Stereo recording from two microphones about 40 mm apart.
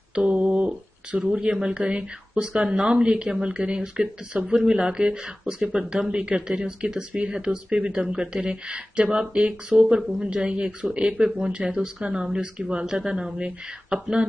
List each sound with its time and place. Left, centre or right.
0.1 s mantra: right
1.5 s speech: right
9.9 s a woman's voice: centre
10.3 s a woman's voice: right